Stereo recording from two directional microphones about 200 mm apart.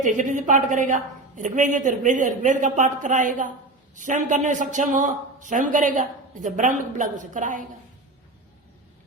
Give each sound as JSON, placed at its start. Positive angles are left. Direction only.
{"t": 0.0, "sound": "speech", "side_deg": -40}